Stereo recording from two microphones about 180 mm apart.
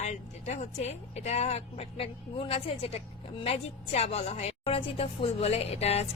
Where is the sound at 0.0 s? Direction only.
40° left (ahead or behind).